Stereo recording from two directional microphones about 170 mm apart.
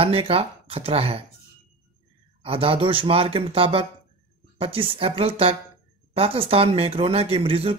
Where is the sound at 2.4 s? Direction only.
30° right (ahead or behind).